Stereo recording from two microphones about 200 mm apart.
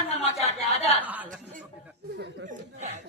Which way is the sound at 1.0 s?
10° right (ahead or behind).